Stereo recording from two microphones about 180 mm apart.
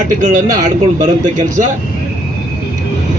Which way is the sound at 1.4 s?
45° right (ahead or behind).